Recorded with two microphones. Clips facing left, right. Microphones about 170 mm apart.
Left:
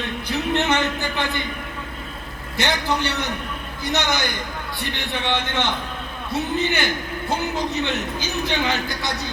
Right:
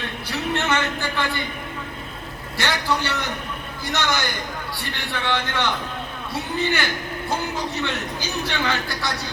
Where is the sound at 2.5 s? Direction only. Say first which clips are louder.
Left 1 dB; 20° left (ahead or behind).